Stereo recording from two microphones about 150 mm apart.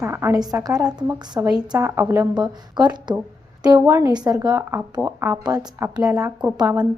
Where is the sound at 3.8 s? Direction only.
20° right (ahead or behind).